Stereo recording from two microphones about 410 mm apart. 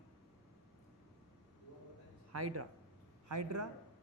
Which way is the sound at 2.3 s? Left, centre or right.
Right.